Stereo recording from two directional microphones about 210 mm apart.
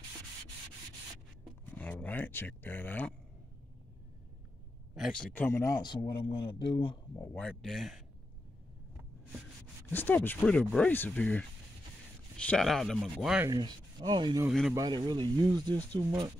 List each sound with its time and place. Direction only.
1.7 s speech: 5° left (ahead or behind)
4.9 s speech: centre (ahead or behind); by 7.0 s 25° left (ahead or behind)
7.2 s speech: 10° left (ahead or behind)
9.8 s speech: 10° left (ahead or behind)
13.5 s speech: 20° right (ahead or behind)